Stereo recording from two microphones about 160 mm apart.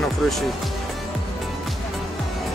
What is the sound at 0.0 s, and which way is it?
Speech, centre (ahead or behind).